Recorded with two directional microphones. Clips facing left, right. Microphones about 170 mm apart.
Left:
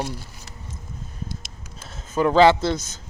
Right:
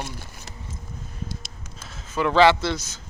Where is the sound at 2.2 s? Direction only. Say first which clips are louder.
Left 3 dB; 35° left (ahead or behind).